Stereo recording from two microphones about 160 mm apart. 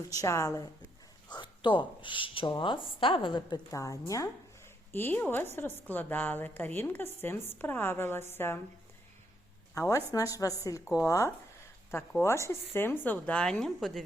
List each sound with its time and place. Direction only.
0.1 s a woman's voice: 20° left (ahead or behind)
9.7 s a woman's voice: 20° left (ahead or behind); by 14.0 s centre (ahead or behind)